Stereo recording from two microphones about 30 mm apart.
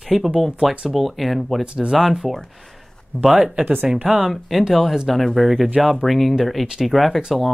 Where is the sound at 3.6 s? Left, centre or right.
Right.